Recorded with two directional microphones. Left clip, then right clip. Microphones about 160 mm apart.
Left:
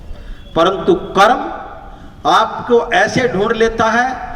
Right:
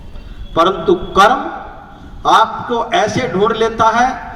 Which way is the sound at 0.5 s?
55° left (ahead or behind).